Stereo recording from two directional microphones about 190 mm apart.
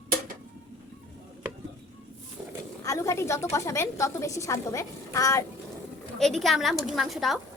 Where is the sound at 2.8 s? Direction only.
15° left (ahead or behind).